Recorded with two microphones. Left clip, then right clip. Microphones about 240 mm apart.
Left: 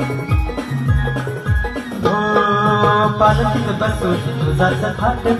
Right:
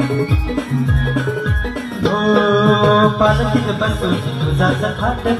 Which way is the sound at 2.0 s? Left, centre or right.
Left.